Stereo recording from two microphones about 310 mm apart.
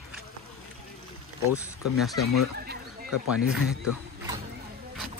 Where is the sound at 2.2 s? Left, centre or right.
Left.